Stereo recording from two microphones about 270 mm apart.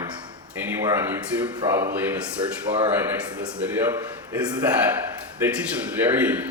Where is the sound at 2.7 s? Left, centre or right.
Right.